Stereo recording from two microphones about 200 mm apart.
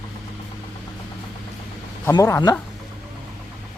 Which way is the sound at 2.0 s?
15° left (ahead or behind).